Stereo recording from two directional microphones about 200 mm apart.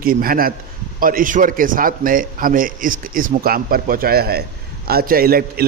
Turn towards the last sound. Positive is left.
turn(degrees=-50)  # may be behind; listen again after turning